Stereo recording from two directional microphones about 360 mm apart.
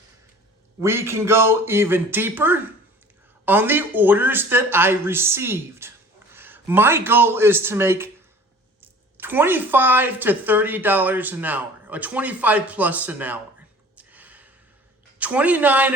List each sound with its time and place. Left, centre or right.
0.8 s a man's voice: centre
13.9 s a sound: centre
15.2 s a woman's voice: centre